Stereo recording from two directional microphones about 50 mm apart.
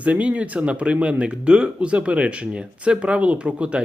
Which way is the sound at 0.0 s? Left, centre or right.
Right.